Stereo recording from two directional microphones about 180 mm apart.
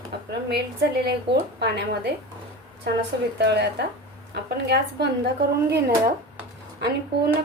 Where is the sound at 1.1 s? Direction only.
65° right (ahead or behind).